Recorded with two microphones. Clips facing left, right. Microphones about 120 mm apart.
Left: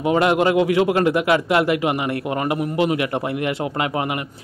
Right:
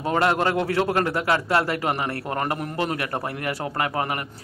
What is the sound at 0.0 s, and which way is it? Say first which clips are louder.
A man's voice: left 4 dB; 15° left (ahead or behind).